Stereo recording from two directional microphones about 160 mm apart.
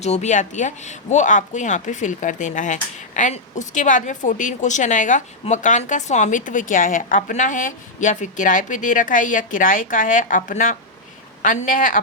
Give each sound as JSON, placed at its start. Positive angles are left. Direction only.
{"t": 0.0, "sound": "a woman's voice", "side_deg": 45}